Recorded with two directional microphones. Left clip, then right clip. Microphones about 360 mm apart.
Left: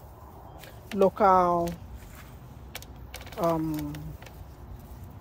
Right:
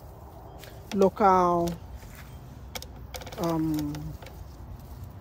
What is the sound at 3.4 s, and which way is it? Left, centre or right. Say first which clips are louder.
Speech: left 1 dB; centre.